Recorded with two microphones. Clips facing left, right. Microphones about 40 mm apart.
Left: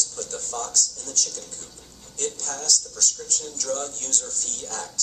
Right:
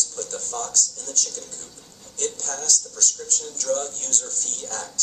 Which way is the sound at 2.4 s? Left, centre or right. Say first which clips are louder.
Even; centre.